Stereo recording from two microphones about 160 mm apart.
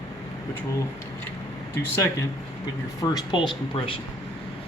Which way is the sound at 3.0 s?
25° left (ahead or behind).